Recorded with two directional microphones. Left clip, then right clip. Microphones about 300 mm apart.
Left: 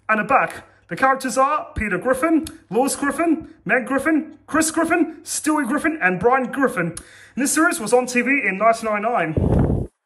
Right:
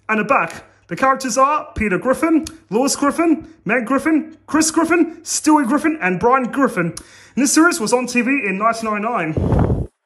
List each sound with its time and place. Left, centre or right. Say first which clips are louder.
0.0 s a man's voice: right 1 dB; centre